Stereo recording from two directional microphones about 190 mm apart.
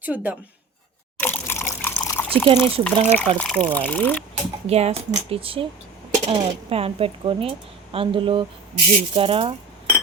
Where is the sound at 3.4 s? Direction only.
5° left (ahead or behind).